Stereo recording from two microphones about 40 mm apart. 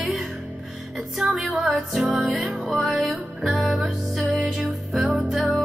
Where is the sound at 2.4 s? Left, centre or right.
Centre.